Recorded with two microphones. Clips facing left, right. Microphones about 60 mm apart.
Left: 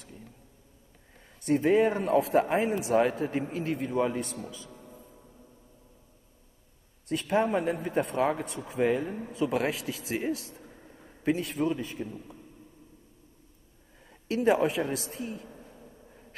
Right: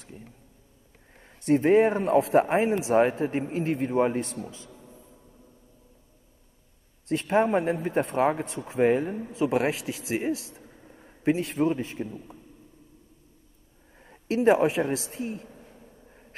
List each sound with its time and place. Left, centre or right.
0.0 s vehicle: right
1.4 s a man's voice: right
4.6 s music: left
7.1 s a man's voice: right
10.7 s a sound: centre
11.2 s a man's voice: right
14.0 s a woman's voice: right